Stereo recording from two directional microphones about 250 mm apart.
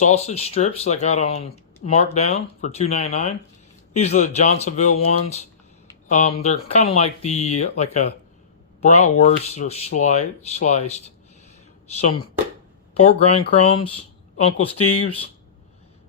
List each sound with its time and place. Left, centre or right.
0.0 s speech: left
13.7 s a sound: left
14.8 s speech: left